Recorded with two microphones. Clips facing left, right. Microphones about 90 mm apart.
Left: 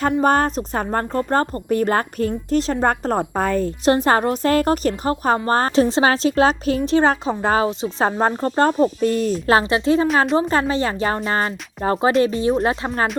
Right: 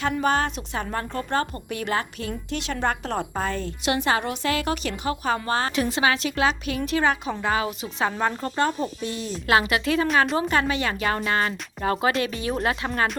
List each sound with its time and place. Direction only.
0.0 s speech: 45° left (ahead or behind)
9.5 s a woman's voice: 30° left (ahead or behind)